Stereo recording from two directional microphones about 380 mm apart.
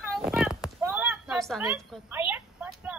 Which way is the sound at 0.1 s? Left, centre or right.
Centre.